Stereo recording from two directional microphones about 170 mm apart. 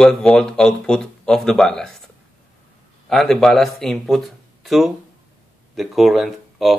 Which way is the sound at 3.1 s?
Centre (ahead or behind).